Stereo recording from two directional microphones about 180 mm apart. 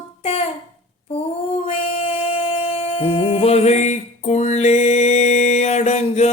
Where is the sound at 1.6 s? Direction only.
35° left (ahead or behind).